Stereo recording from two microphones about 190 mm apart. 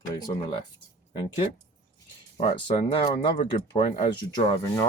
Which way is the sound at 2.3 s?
25° left (ahead or behind).